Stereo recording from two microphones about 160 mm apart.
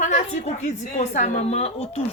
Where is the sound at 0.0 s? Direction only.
50° left (ahead or behind).